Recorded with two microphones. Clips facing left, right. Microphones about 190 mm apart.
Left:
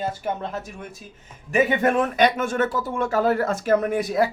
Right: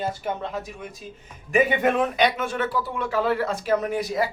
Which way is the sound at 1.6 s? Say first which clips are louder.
Left 1 dB; 45° left (ahead or behind).